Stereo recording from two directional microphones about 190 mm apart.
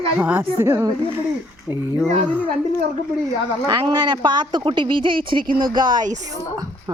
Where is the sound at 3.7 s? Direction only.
20° right (ahead or behind).